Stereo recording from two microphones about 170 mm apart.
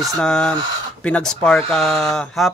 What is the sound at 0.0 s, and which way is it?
Speech, centre (ahead or behind).